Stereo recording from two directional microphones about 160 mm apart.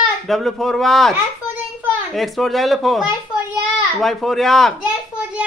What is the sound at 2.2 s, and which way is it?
A child's voice, centre (ahead or behind).